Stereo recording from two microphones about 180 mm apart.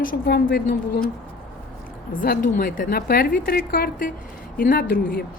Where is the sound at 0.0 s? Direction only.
55° left (ahead or behind).